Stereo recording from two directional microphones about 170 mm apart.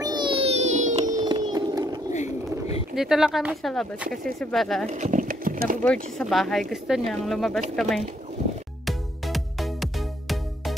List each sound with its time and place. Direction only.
0.0 s music: 25° right (ahead or behind); by 1.1 s 45° right (ahead or behind)
1.1 s music: 25° right (ahead or behind)
2.9 s speech: centre (ahead or behind)
4.8 s horse: 45° right (ahead or behind)
5.8 s speech: 5° left (ahead or behind)
8.8 s music: centre (ahead or behind)